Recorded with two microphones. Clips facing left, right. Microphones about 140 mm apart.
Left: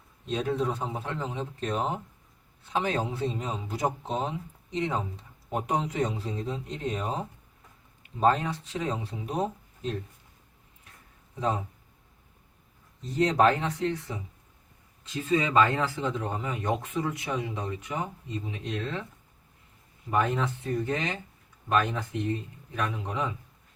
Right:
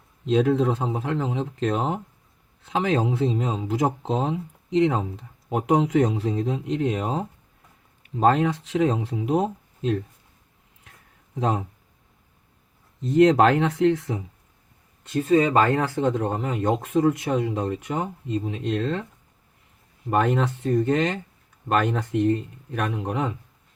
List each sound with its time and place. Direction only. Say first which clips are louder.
0.3 s speech: right 8 dB; 90° right
8.2 s speech: right 5 dB; 85° right
11.3 s speech: right 4 dB; 85° right
13.0 s speech: right 7 dB; 75° right (ahead or behind)
15.0 s speech: right 8 dB; 55° right (ahead or behind)
20.1 s speech: right 5 dB; 70° right (ahead or behind)